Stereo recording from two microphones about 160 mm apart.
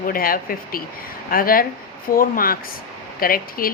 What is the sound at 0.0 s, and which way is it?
Speech, 65° left (ahead or behind).